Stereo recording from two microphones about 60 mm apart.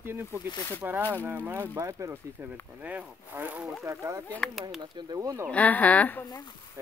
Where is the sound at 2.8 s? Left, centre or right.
Right.